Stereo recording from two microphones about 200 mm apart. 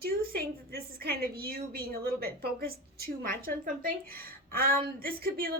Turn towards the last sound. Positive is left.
turn(degrees=-45)  # may be behind; listen again after turning